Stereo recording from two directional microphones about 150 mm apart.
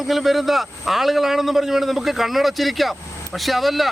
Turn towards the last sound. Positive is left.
turn(degrees=0)  # may be behind; listen again after turning